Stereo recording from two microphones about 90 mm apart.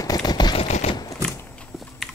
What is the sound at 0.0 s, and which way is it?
Typewriter, 45° left (ahead or behind).